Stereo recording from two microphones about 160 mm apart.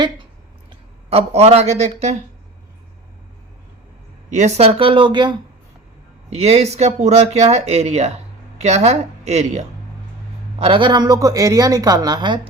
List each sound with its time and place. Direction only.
1.1 s speech: 40° right (ahead or behind)
4.4 s speech: 45° right (ahead or behind); by 5.4 s 30° right (ahead or behind)
6.3 s speech: 40° right (ahead or behind)
10.6 s speech: 35° right (ahead or behind)